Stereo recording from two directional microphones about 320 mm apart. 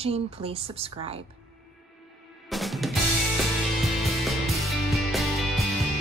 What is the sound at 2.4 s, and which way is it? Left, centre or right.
Drum, centre.